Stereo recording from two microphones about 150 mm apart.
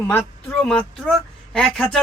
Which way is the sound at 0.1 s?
10° left (ahead or behind).